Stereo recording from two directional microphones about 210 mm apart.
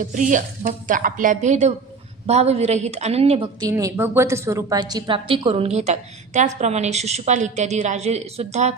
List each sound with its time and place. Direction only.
0.0 s a woman's voice: 35° right (ahead or behind)
3.7 s a woman's voice: 15° right (ahead or behind); by 8.7 s 30° right (ahead or behind)